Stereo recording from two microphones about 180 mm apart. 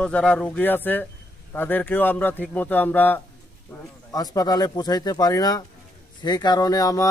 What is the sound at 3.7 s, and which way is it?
A man's voice, 20° left (ahead or behind).